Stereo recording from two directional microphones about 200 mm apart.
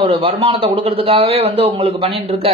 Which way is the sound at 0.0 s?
30° right (ahead or behind).